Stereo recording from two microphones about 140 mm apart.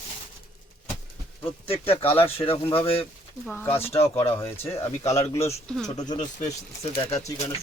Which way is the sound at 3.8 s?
45° left (ahead or behind).